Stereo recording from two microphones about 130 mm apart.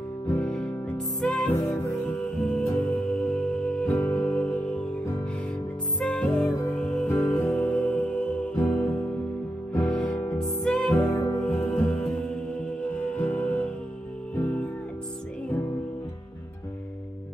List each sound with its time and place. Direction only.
0.4 s music: 5° left (ahead or behind)
2.6 s music: 15° left (ahead or behind)
9.8 s music: 10° left (ahead or behind)
11.0 s music: 25° left (ahead or behind)
11.7 s music: 5° left (ahead or behind)